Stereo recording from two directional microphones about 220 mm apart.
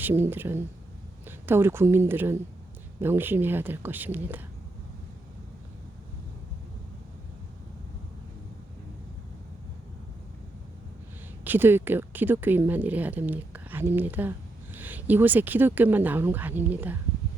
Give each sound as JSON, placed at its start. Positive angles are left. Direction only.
{"t": 0.0, "sound": "a woman's voice", "side_deg": -10}
{"t": 11.4, "sound": "speech", "side_deg": -10}